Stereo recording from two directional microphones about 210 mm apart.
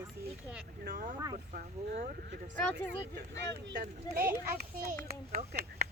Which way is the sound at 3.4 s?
50° right (ahead or behind).